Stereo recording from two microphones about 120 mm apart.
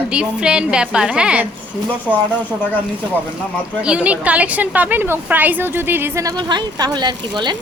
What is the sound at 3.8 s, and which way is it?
A woman's voice, 10° right (ahead or behind).